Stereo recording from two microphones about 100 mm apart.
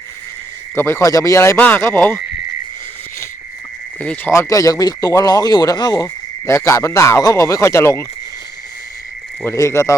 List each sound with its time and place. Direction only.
0.8 s speech: 25° left (ahead or behind)
4.0 s speech: 15° left (ahead or behind)
4.3 s speech: 30° left (ahead or behind)
6.4 s speech: 30° left (ahead or behind)
9.4 s speech: 25° left (ahead or behind)